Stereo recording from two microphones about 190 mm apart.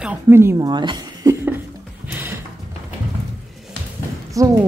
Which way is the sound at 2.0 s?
10° right (ahead or behind).